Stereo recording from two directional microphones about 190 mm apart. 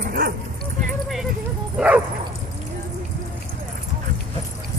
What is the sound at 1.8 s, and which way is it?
Speech, 5° right (ahead or behind).